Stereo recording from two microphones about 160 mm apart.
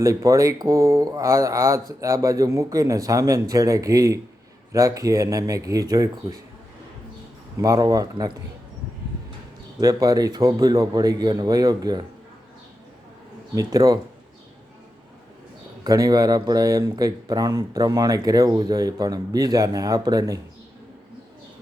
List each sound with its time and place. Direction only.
0.0 s speech: 20° right (ahead or behind)
7.6 s speech: 25° right (ahead or behind)
9.8 s speech: 20° right (ahead or behind)
13.6 s speech: 25° right (ahead or behind)
15.8 s speech: 25° right (ahead or behind)